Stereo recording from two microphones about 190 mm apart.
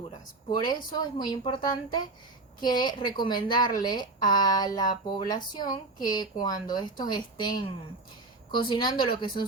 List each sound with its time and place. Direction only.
0.9 s speech: 20° left (ahead or behind)